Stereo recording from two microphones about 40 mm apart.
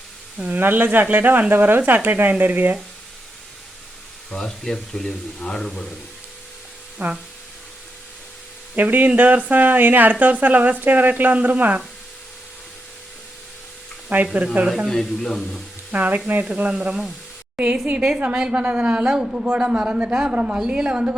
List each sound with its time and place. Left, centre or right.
0.4 s speech: right
4.3 s speech: centre
7.0 s speech: right
8.7 s speech: right
14.1 s speech: right
14.8 s speech: centre
15.9 s a man's voice: right
19.2 s speech: centre
19.5 s a man's voice: right